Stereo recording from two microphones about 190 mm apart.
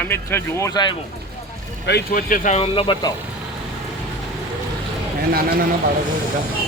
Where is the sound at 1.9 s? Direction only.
55° left (ahead or behind); by 3.1 s 25° left (ahead or behind).